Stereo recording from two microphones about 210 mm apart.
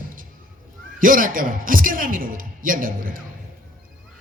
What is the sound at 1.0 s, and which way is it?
A man's voice, 40° right (ahead or behind).